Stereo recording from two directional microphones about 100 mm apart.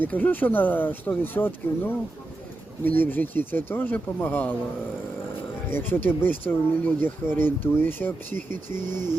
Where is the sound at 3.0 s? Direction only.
20° left (ahead or behind).